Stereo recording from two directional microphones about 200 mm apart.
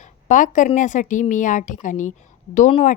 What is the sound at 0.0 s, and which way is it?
Speech, 40° left (ahead or behind).